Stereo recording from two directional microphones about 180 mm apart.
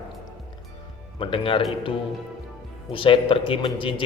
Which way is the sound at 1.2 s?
30° left (ahead or behind).